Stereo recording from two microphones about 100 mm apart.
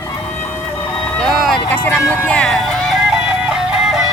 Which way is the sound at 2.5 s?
5° left (ahead or behind).